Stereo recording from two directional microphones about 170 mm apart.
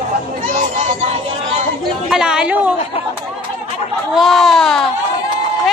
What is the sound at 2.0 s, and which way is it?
Speech, 5° right (ahead or behind).